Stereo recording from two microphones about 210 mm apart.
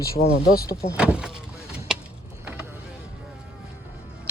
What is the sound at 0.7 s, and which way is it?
Speech, 15° left (ahead or behind).